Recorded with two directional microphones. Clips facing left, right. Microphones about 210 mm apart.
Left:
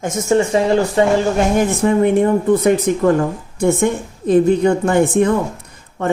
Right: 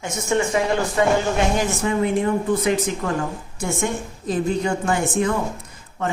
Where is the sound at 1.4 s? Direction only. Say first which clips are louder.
Left 6 dB; 55° left (ahead or behind).